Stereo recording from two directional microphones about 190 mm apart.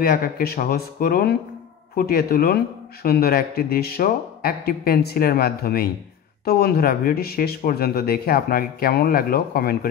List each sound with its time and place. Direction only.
0.0 s speech: 55° left (ahead or behind)